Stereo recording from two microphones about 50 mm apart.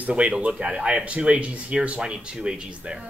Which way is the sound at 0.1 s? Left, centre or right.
Right.